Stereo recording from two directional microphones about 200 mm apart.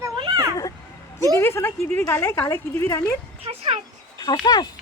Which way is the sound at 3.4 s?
30° right (ahead or behind).